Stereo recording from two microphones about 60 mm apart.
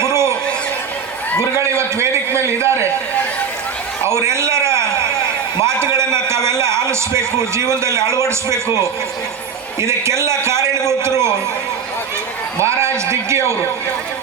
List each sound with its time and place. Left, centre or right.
0.0 s a sound: right
1.4 s a man's voice: right
4.0 s a sound: right
5.5 s a man's voice: right
9.8 s a man's voice: right
12.5 s a man's voice: right